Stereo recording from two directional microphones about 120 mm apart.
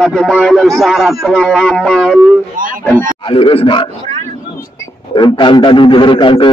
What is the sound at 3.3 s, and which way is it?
Speech, 50° left (ahead or behind).